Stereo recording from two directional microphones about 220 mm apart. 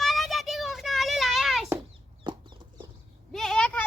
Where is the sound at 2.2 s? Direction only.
20° right (ahead or behind).